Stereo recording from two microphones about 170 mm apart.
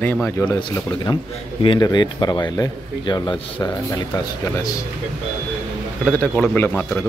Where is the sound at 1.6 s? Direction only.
30° left (ahead or behind).